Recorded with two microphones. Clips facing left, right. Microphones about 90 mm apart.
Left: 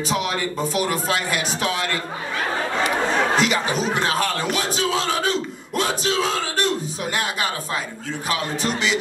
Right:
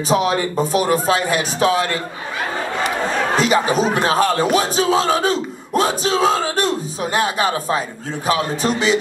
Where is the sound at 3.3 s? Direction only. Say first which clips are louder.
Right 5 dB; 35° right (ahead or behind).